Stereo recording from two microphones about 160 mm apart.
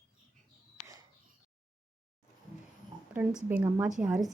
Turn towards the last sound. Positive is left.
turn(degrees=-5)  # may be behind; listen again after turning